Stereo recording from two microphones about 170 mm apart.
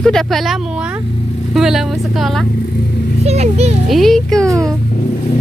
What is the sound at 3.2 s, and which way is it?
Speech, 40° right (ahead or behind).